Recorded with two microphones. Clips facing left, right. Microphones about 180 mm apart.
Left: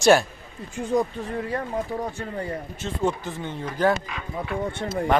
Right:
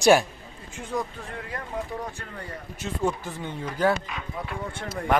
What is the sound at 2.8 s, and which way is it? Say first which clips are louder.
Speech: left 1 dB; 10° right (ahead or behind).